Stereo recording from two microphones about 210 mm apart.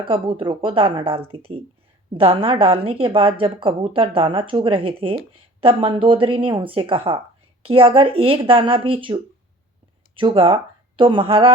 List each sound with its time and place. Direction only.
0.0 s a woman's voice: 25° right (ahead or behind)